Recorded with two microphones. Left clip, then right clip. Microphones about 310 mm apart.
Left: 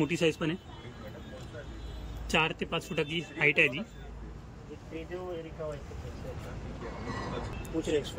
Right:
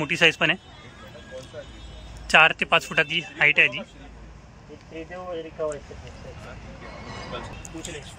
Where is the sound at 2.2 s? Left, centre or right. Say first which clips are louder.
Right 12 dB; centre.